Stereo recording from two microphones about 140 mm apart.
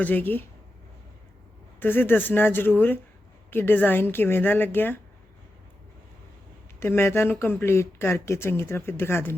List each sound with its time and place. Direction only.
0.0 s speech: 15° left (ahead or behind)
1.8 s speech: 15° left (ahead or behind)
6.7 s speech: 15° left (ahead or behind)